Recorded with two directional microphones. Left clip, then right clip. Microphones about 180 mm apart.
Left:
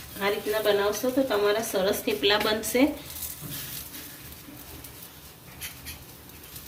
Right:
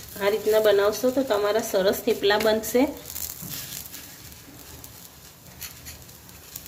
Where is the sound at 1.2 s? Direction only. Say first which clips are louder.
Right 2 dB; 60° right (ahead or behind).